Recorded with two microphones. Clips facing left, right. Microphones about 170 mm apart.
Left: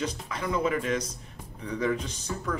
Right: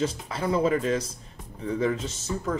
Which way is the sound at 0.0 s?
30° right (ahead or behind).